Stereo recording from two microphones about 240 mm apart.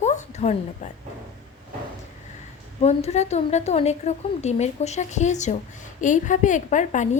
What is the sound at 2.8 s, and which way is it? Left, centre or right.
A woman's voice, left.